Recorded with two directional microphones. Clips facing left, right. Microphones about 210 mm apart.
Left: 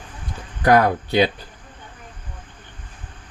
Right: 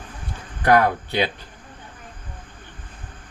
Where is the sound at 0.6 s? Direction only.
40° left (ahead or behind).